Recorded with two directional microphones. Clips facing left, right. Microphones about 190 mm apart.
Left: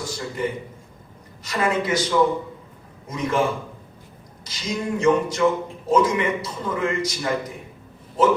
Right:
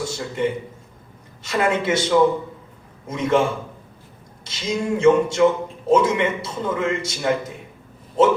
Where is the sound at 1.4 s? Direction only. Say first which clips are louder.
Right 2 dB; 25° right (ahead or behind).